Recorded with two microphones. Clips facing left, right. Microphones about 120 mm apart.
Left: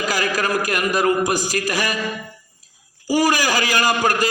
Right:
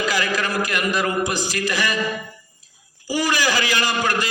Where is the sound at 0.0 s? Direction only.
40° left (ahead or behind).